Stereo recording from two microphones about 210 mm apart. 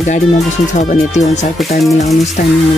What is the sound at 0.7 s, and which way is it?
Speech, 35° left (ahead or behind).